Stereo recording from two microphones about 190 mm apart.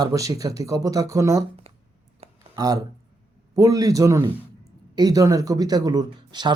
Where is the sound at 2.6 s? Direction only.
20° right (ahead or behind).